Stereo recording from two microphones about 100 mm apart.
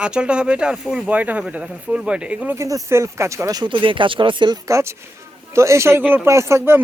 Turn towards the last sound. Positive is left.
turn(degrees=-30)  # may be behind; listen again after turning